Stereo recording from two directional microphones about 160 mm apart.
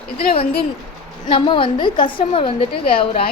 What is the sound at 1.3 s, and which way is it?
A woman's voice, 30° left (ahead or behind).